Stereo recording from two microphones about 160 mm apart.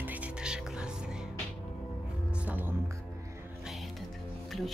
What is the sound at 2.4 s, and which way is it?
Music, 10° right (ahead or behind).